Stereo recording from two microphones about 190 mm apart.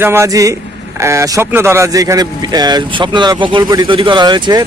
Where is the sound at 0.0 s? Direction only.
15° right (ahead or behind).